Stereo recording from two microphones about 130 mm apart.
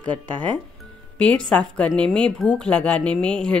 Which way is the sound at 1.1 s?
10° left (ahead or behind).